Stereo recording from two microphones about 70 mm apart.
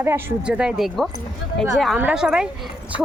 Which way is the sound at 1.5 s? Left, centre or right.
Centre.